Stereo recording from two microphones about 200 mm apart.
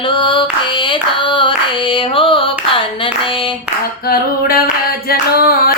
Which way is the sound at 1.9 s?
25° left (ahead or behind).